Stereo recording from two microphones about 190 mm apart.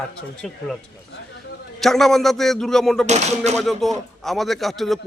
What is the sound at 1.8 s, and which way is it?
A man's voice, centre (ahead or behind).